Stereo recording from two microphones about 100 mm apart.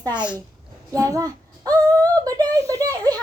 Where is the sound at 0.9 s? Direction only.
35° right (ahead or behind).